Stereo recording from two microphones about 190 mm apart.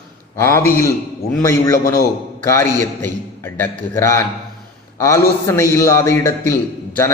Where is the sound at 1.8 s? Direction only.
50° left (ahead or behind).